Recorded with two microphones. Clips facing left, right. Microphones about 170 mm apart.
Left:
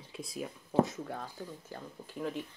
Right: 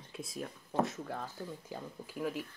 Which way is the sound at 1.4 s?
10° right (ahead or behind).